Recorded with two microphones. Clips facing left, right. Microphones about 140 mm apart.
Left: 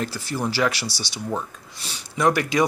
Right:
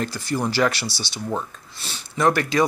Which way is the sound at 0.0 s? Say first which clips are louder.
Right 2 dB; 5° left (ahead or behind).